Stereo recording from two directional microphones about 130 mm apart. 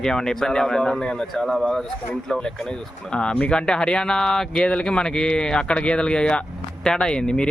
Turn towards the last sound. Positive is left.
turn(degrees=5)  # may be behind; listen again after turning